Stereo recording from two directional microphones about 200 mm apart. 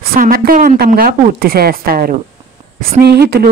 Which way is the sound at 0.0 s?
45° right (ahead or behind).